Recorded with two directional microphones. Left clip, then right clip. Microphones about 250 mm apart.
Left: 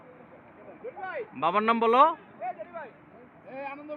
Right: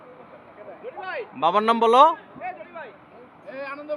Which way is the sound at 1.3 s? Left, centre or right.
Right.